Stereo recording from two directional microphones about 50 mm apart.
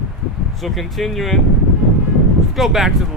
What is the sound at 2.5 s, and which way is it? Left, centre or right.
Speech, centre.